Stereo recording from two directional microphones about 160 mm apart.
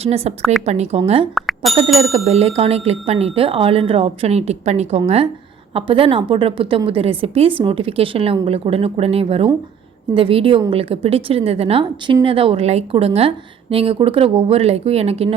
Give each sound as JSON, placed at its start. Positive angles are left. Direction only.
{"t": 0.0, "sound": "a woman's voice", "side_deg": -40}
{"t": 1.4, "sound": "bicycle bell", "side_deg": 0}
{"t": 2.1, "sound": "a woman's voice", "side_deg": -40}